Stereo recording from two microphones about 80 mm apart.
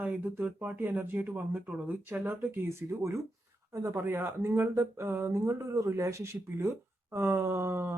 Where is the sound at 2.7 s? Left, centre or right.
Right.